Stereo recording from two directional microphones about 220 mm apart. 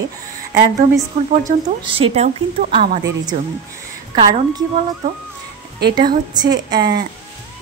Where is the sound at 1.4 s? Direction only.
25° right (ahead or behind).